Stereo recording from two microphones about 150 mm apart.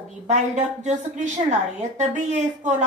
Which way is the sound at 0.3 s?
50° right (ahead or behind).